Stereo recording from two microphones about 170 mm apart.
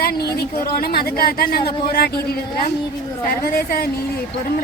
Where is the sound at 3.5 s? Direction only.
60° left (ahead or behind).